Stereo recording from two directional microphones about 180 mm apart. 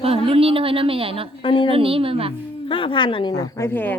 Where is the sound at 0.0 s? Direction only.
30° right (ahead or behind).